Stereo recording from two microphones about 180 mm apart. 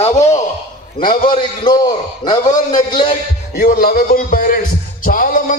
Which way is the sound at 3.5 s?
55° left (ahead or behind).